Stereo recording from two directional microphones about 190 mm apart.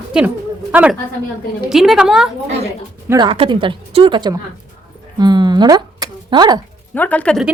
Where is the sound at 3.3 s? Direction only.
30° right (ahead or behind).